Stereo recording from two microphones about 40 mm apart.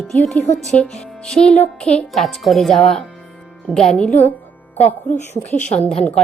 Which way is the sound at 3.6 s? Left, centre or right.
Centre.